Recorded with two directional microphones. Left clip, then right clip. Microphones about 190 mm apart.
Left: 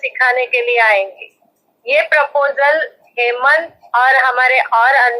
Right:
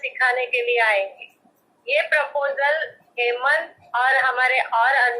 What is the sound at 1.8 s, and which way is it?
A woman's voice, 40° left (ahead or behind).